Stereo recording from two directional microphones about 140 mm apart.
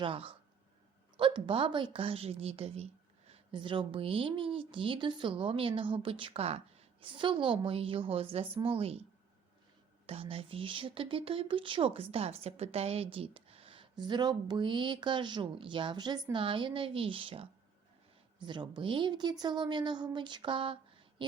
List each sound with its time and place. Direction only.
0.0 s speech: 40° right (ahead or behind)
10.1 s speech: 45° right (ahead or behind)